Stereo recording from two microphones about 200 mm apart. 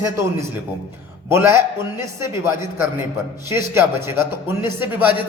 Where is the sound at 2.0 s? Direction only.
10° right (ahead or behind).